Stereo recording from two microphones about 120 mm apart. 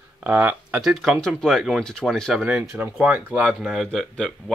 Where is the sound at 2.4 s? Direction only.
10° right (ahead or behind).